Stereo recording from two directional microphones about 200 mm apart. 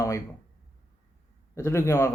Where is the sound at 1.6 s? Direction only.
15° left (ahead or behind).